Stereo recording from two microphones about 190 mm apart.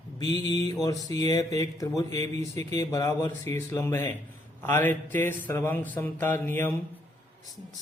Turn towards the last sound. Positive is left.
turn(degrees=10)  # may be behind; listen again after turning